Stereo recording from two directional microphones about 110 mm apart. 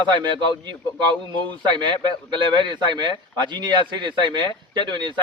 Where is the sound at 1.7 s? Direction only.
45° right (ahead or behind).